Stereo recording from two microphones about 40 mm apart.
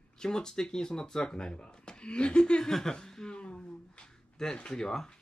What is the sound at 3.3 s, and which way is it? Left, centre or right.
Speech, left.